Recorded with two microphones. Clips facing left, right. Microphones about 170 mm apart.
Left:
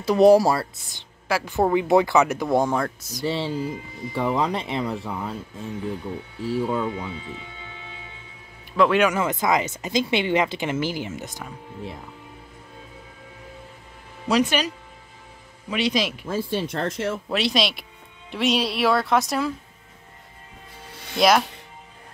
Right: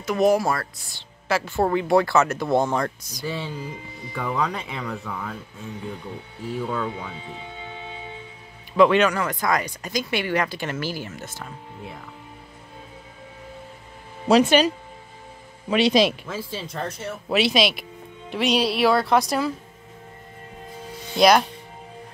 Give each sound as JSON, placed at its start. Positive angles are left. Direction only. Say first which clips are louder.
{"t": 0.0, "sound": "speech", "louder": "left 5 dB", "side_deg": 30}
{"t": 3.3, "sound": "speech", "louder": "left 5 dB", "side_deg": 30}
{"t": 6.5, "sound": "speech", "louder": "left 3 dB", "side_deg": 20}
{"t": 8.7, "sound": "speech", "louder": "right 3 dB", "side_deg": 0}
{"t": 9.0, "sound": "speech", "louder": "left 1 dB", "side_deg": 20}
{"t": 14.2, "sound": "speech", "louder": "right 5 dB", "side_deg": -30}
{"t": 15.7, "sound": "speech", "louder": "right 5 dB", "side_deg": -30}
{"t": 16.3, "sound": "speech", "louder": "left 6 dB", "side_deg": 60}
{"t": 17.3, "sound": "speech", "louder": "right 6 dB", "side_deg": -5}
{"t": 21.2, "sound": "speech", "louder": "right 2 dB", "side_deg": 0}